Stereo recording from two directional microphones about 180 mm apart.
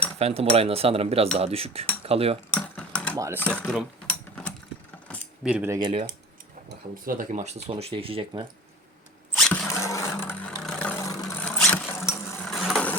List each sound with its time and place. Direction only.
0.2 s speech: 35° right (ahead or behind)
2.5 s typing: 5° left (ahead or behind)
3.2 s speech: 15° right (ahead or behind)
3.4 s mechanisms: 5° left (ahead or behind)
5.0 s keys jangling: 5° left (ahead or behind)
5.5 s speech: 5° right (ahead or behind)
6.7 s speech: 50° right (ahead or behind); by 8.4 s 25° right (ahead or behind)
9.3 s a sound: 5° left (ahead or behind)
9.7 s vehicle: 15° left (ahead or behind)
12.5 s vehicle: centre (ahead or behind)